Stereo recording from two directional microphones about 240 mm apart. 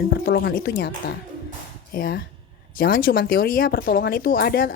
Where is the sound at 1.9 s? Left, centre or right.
Left.